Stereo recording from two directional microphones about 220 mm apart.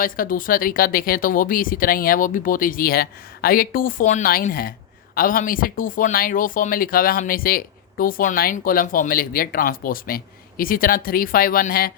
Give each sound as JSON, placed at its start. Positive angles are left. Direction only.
{"t": 0.0, "sound": "speech", "side_deg": 40}